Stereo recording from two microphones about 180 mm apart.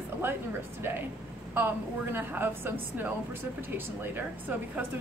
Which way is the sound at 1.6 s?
10° right (ahead or behind).